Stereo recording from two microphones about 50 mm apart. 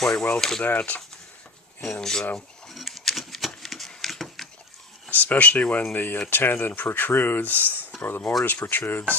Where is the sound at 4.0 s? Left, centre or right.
Centre.